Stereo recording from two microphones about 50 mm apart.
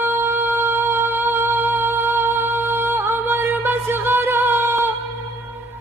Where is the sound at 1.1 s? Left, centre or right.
Right.